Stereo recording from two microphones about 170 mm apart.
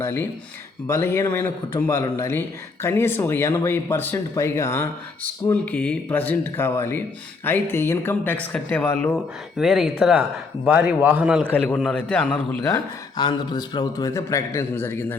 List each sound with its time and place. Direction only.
0.0 s speech: 15° left (ahead or behind)
9.1 s a man's voice: centre (ahead or behind)
11.4 s speech: 10° left (ahead or behind)
12.7 s a man's voice: 25° left (ahead or behind)